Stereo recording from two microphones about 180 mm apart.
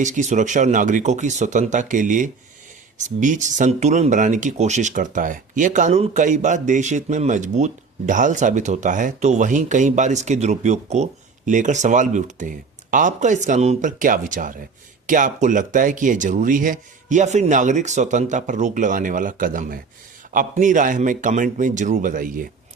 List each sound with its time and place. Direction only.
0.0 s speech: 40° right (ahead or behind)